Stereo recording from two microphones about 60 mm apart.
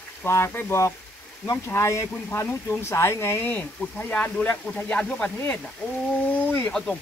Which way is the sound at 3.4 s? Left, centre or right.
Left.